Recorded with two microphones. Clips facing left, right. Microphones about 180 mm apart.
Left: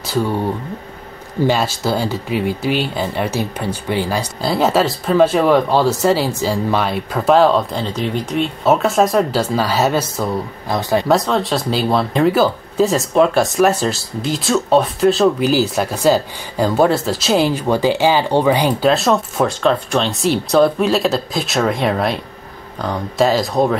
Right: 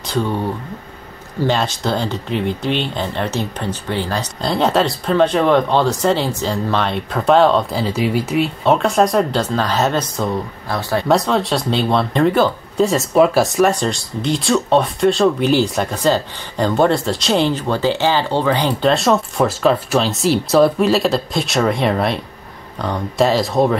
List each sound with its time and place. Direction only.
0.1 s speech: 10° left (ahead or behind)
1.4 s speech: 10° left (ahead or behind)
8.6 s speech: 5° left (ahead or behind)
10.7 s speech: 15° left (ahead or behind)
11.1 s speech: centre (ahead or behind)